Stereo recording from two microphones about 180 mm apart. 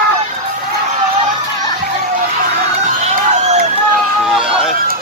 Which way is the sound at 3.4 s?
40° right (ahead or behind).